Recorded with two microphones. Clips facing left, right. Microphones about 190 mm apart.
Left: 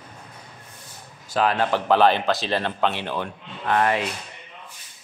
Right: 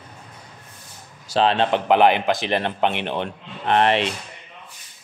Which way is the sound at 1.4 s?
25° right (ahead or behind).